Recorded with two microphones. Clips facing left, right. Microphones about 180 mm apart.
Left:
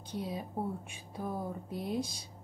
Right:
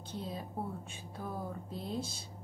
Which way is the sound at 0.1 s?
15° left (ahead or behind).